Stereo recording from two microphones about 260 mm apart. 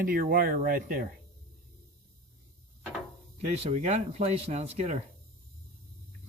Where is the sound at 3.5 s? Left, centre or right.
Right.